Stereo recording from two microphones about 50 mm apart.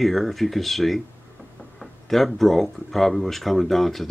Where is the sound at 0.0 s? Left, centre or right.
Centre.